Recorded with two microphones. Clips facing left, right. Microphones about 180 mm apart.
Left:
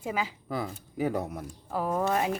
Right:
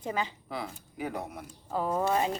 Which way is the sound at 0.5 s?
40° left (ahead or behind).